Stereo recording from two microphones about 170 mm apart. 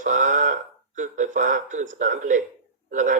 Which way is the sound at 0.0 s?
45° right (ahead or behind).